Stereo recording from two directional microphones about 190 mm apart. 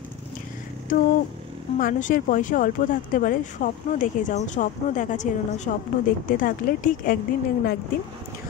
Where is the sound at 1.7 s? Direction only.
45° left (ahead or behind).